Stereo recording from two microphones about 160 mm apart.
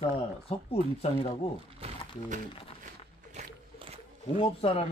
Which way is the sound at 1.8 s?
50° right (ahead or behind).